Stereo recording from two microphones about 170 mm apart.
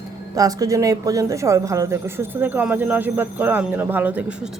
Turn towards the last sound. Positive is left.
turn(degrees=-10)  # may be behind; listen again after turning